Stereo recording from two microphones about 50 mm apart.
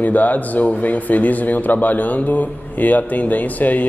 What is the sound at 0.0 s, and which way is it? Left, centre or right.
Speech, left.